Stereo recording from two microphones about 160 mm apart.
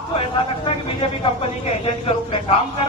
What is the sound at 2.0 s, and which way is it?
Speech, 35° left (ahead or behind).